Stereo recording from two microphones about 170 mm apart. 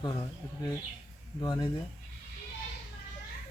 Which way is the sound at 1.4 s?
25° left (ahead or behind).